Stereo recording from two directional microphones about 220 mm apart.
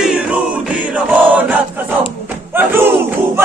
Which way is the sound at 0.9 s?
10° right (ahead or behind).